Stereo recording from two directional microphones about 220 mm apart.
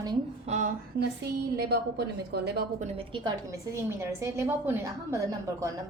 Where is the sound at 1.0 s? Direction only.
45° right (ahead or behind).